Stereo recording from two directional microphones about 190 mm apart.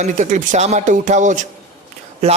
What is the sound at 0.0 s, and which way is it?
A man's voice, 40° right (ahead or behind).